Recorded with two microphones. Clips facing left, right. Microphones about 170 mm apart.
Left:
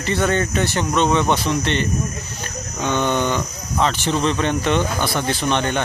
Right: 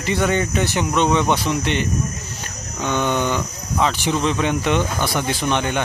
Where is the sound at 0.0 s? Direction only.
15° right (ahead or behind).